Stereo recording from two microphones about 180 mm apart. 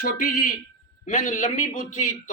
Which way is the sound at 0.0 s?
50° left (ahead or behind).